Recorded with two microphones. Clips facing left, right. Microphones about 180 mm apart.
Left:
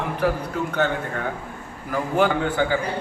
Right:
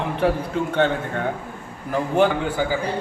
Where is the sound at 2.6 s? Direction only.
5° right (ahead or behind).